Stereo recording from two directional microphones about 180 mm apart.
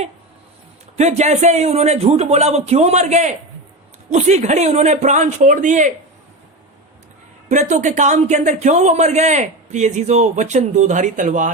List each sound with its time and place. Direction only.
0.9 s a man's voice: 40° right (ahead or behind)
7.4 s a man's voice: 40° right (ahead or behind)